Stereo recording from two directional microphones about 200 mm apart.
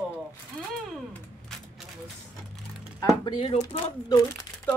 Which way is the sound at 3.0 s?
20° left (ahead or behind).